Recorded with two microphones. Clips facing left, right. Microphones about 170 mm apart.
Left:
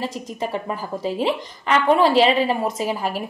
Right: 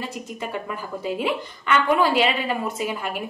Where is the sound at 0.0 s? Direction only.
35° left (ahead or behind).